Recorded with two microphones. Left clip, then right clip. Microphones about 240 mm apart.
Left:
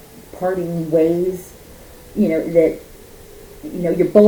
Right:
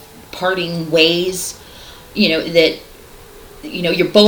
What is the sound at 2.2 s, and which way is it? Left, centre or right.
Speech, centre.